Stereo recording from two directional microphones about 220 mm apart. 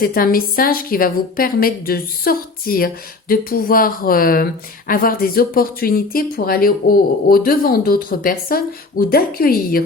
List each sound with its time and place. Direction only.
0.0 s speech: 40° left (ahead or behind)